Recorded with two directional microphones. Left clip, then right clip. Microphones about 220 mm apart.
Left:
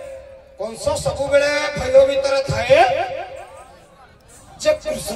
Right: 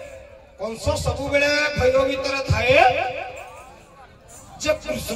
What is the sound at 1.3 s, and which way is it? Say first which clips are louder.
Speech: left 2 dB; 15° left (ahead or behind).